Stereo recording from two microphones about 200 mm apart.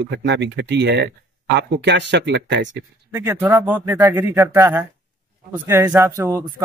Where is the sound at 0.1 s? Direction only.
60° right (ahead or behind).